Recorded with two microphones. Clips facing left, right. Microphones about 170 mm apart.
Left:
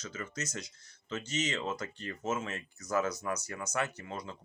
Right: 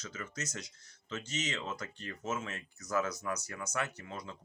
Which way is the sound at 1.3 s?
35° left (ahead or behind).